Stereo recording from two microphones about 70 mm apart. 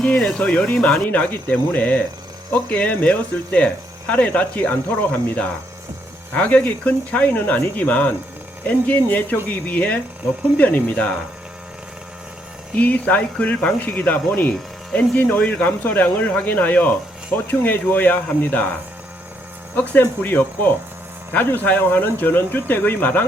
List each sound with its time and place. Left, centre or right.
0.0 s speech: centre
12.7 s speech: left
19.7 s speech: left